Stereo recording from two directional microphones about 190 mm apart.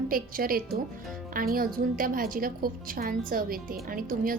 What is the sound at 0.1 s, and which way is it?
A woman's voice, 50° right (ahead or behind).